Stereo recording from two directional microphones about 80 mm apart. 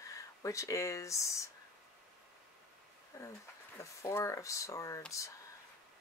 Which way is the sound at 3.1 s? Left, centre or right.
Left.